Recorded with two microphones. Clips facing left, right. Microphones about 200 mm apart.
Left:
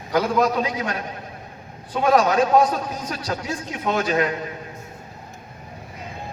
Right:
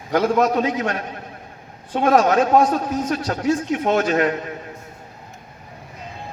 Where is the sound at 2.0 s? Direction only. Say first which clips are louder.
Right 2 dB; 50° right (ahead or behind).